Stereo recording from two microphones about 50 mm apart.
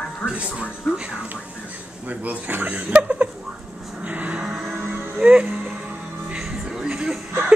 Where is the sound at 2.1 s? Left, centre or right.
Right.